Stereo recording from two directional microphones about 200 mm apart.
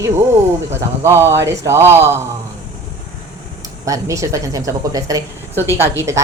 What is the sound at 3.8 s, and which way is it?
Speech, 15° right (ahead or behind).